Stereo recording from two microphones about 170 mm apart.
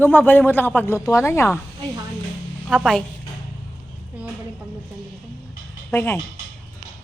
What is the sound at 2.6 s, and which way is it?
Speech, centre (ahead or behind).